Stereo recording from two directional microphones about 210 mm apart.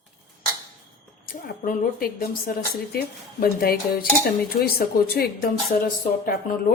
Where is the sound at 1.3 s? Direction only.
40° left (ahead or behind).